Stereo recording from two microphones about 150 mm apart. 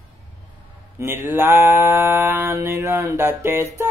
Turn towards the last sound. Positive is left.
turn(degrees=-15)  # may be behind; listen again after turning